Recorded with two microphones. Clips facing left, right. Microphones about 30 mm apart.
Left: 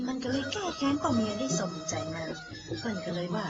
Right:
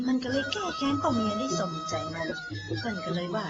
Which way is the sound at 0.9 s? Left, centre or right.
Right.